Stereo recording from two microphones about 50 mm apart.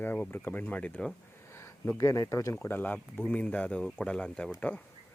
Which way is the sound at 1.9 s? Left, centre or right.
Left.